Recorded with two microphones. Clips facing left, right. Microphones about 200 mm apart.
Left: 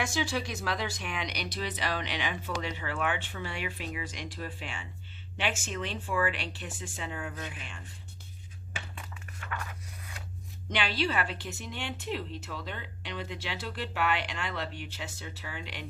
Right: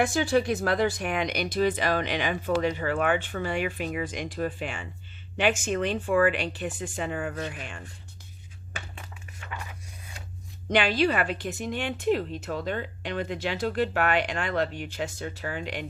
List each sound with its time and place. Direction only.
0.0 s a woman's voice: 55° right (ahead or behind)
7.6 s a woman's voice: 50° right (ahead or behind)
10.7 s a woman's voice: 50° right (ahead or behind)